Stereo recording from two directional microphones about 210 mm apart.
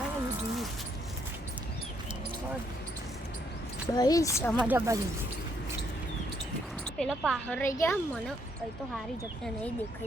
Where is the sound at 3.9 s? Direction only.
15° left (ahead or behind).